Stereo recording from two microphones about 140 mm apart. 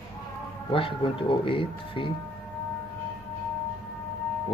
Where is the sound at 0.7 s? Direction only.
40° left (ahead or behind).